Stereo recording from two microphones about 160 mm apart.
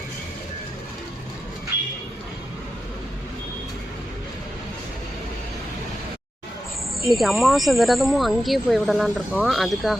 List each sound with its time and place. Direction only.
7.0 s speech: centre (ahead or behind)